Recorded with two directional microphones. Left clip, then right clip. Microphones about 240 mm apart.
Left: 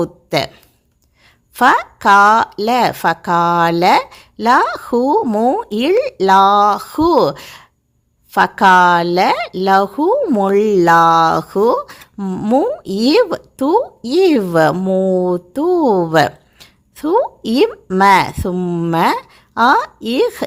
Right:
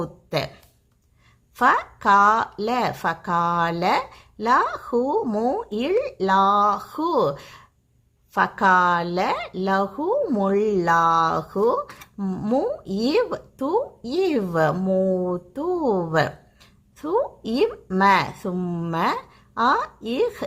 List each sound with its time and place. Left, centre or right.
0.0 s speech: left